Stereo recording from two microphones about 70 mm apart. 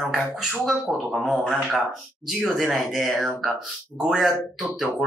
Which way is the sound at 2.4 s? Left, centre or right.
Centre.